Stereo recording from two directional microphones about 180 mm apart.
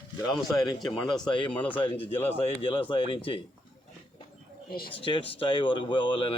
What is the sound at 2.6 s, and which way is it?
Speech, 30° left (ahead or behind).